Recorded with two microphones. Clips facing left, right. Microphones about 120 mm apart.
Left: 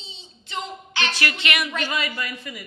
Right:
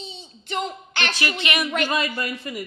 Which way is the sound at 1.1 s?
15° right (ahead or behind).